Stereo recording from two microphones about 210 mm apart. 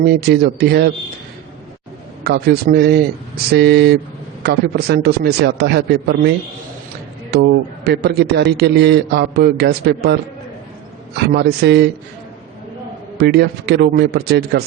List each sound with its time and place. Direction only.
0.0 s a man's voice: 50° right (ahead or behind)
2.2 s a man's voice: 50° right (ahead or behind)
11.3 s a man's voice: 50° right (ahead or behind)
13.1 s a man's voice: 50° right (ahead or behind)